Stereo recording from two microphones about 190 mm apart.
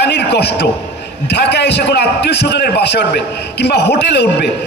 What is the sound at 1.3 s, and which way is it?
A man's voice, 60° left (ahead or behind).